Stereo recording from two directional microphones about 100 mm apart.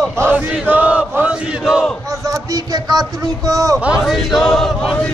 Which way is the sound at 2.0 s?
35° right (ahead or behind).